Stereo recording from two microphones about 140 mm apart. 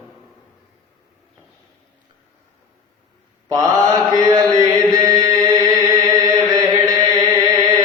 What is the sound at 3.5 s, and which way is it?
Mantra, 25° right (ahead or behind).